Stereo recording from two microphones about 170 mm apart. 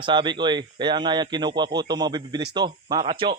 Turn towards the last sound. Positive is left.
turn(degrees=-30)  # may be behind; listen again after turning